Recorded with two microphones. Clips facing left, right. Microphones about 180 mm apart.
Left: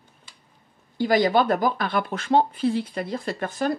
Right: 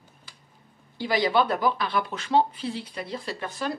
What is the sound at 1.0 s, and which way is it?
Speech, 45° left (ahead or behind).